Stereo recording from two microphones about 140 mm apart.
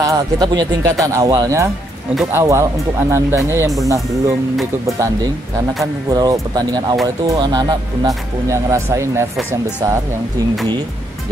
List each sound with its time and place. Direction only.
0.0 s a man's voice: 30° right (ahead or behind)
6.0 s a man's voice: 25° right (ahead or behind)
8.5 s a man's voice: 20° right (ahead or behind)